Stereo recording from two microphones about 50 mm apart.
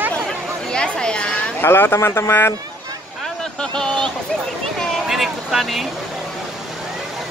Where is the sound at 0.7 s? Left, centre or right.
Centre.